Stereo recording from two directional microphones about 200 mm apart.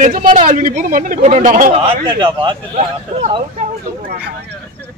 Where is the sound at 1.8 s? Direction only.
25° right (ahead or behind).